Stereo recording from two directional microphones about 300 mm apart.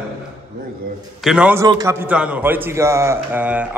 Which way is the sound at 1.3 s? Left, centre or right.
Centre.